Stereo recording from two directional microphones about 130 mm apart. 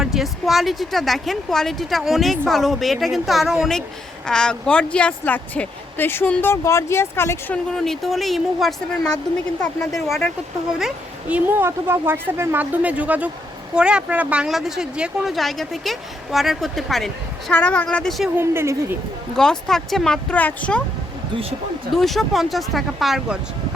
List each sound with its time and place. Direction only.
0.0 s speech: centre (ahead or behind); by 7.6 s 15° left (ahead or behind)
7.7 s speech: centre (ahead or behind)
10.8 s a woman's voice: 5° right (ahead or behind)
18.3 s speech: 20° right (ahead or behind)
19.4 s speech: 5° left (ahead or behind)
21.9 s speech: centre (ahead or behind)